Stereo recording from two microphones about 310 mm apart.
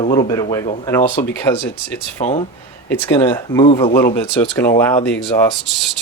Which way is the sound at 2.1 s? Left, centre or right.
Centre.